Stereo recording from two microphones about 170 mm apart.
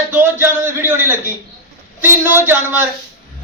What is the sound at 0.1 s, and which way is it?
A man's voice, 15° right (ahead or behind).